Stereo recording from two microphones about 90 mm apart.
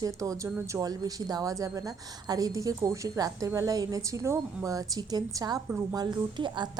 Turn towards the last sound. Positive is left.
turn(degrees=-55)  # may be behind; listen again after turning